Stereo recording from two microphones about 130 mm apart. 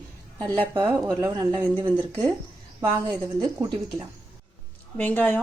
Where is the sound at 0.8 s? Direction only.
15° right (ahead or behind).